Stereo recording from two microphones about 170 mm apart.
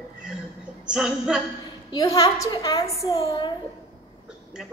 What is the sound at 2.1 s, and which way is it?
A woman's voice, 20° left (ahead or behind).